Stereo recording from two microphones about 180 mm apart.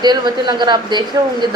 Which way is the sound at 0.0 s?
25° right (ahead or behind).